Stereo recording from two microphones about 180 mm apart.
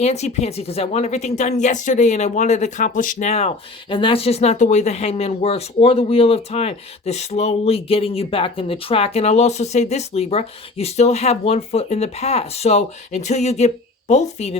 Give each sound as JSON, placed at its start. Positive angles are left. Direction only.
{"t": 0.0, "sound": "speech", "side_deg": 40}